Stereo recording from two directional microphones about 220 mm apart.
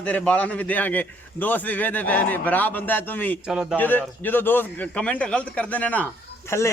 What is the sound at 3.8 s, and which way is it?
A man's voice, 10° left (ahead or behind).